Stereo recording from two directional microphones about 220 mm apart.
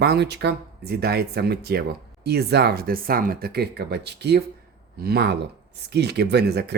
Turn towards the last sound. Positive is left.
turn(degrees=-50)  # may be behind; listen again after turning